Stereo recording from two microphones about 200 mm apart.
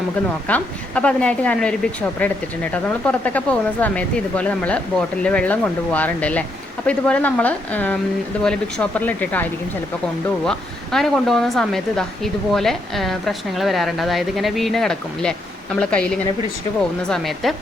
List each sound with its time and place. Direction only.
0.4 s a woman's voice: 5° left (ahead or behind)